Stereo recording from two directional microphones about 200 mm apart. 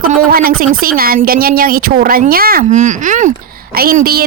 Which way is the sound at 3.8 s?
50° right (ahead or behind).